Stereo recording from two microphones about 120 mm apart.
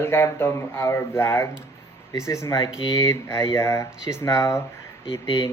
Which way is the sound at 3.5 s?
25° left (ahead or behind).